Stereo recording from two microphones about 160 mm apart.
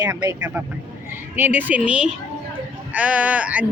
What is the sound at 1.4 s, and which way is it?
A woman's voice, 10° right (ahead or behind).